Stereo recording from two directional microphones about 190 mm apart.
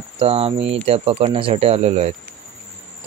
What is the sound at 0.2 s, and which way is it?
Speech, 30° right (ahead or behind).